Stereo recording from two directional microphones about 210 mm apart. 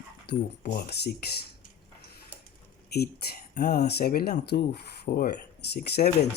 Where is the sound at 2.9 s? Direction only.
50° left (ahead or behind).